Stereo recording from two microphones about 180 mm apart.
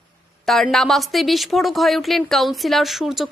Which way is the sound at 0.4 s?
Centre (ahead or behind).